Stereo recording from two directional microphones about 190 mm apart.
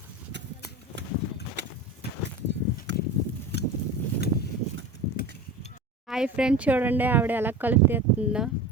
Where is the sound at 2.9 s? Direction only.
65° right (ahead or behind).